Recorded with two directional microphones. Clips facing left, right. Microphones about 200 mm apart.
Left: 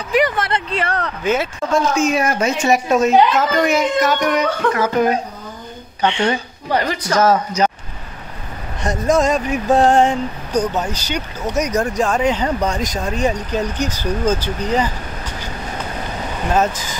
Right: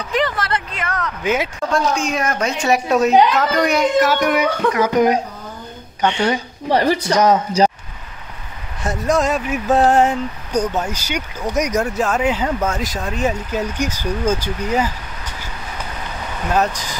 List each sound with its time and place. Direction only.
0.4 s a sound: 25° left (ahead or behind)
1.2 s a woman's voice: 10° right (ahead or behind)
1.7 s a woman's voice: 5° left (ahead or behind)
6.7 s speech: 30° right (ahead or behind)
7.1 s a woman's voice: 20° right (ahead or behind)
8.8 s speech: centre (ahead or behind)
16.5 s speech: centre (ahead or behind)